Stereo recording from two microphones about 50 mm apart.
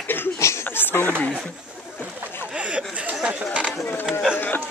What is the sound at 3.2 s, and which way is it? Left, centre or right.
Chatter, right.